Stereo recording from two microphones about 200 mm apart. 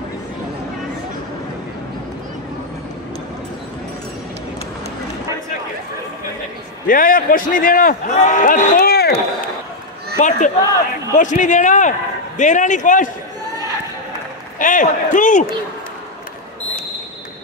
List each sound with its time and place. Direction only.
6.9 s a man's voice: 45° left (ahead or behind)
10.1 s a man's voice: 40° left (ahead or behind)
14.6 s a man's voice: 40° left (ahead or behind)